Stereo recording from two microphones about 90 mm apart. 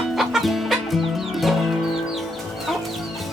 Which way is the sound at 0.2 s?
Centre (ahead or behind).